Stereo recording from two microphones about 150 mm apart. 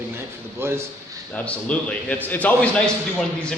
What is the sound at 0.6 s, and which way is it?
Speech, 15° right (ahead or behind).